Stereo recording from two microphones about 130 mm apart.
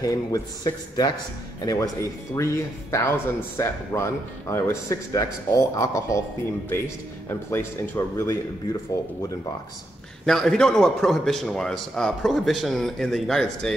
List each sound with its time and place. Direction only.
0.0 s a man's voice: 30° left (ahead or behind)
7.2 s speech: 20° left (ahead or behind)
10.2 s a man's voice: 5° left (ahead or behind)